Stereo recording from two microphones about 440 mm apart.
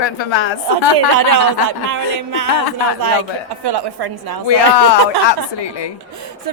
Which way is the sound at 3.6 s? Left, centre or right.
Right.